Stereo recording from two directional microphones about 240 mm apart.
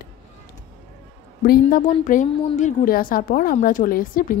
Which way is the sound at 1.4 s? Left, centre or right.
Left.